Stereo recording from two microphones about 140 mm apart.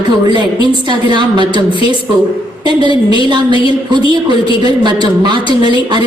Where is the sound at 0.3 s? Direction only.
35° right (ahead or behind).